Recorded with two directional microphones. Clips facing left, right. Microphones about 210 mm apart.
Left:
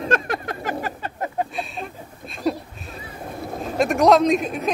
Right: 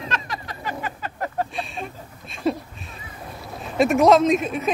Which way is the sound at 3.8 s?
Centre (ahead or behind).